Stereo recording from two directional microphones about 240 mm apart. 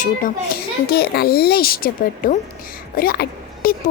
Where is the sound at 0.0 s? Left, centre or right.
Left.